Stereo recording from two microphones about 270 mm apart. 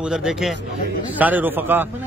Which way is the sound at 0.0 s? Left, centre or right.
Centre.